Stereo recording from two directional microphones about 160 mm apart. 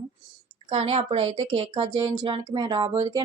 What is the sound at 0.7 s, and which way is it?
A woman's voice, 40° right (ahead or behind).